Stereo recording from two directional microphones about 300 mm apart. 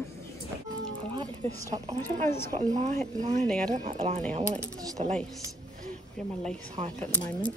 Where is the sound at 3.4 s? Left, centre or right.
Centre.